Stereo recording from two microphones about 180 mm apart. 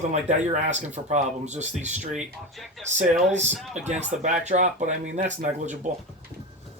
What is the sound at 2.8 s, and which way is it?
Speech, 40° right (ahead or behind).